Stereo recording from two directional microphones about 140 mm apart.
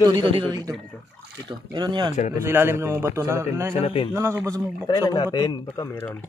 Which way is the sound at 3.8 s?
40° left (ahead or behind).